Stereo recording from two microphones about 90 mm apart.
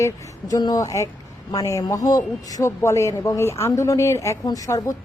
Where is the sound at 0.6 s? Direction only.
40° left (ahead or behind).